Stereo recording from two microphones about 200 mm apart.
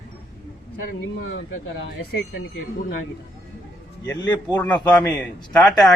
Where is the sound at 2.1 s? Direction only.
55° left (ahead or behind).